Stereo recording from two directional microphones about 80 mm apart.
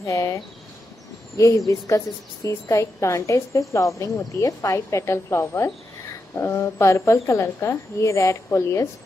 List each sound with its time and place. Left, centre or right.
0.0 s a woman's voice: left